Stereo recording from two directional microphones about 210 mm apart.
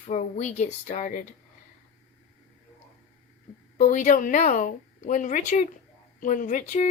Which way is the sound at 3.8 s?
40° left (ahead or behind).